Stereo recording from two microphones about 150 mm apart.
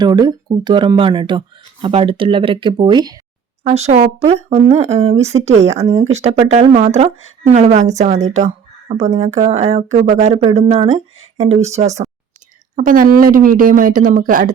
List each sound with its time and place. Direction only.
0.0 s speech: 30° right (ahead or behind)
3.6 s speech: 45° right (ahead or behind)
12.7 s speech: 65° right (ahead or behind)